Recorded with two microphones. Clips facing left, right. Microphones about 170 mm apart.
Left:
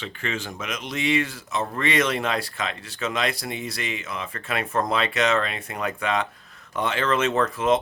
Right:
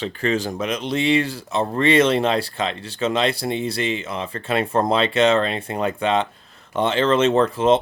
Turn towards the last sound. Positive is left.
turn(degrees=-30)  # may be behind; listen again after turning